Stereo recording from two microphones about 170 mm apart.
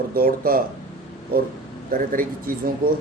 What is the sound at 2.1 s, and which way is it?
Speech, 55° right (ahead or behind).